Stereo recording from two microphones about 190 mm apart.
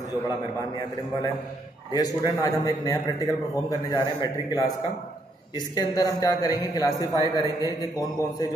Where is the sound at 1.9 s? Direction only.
20° left (ahead or behind).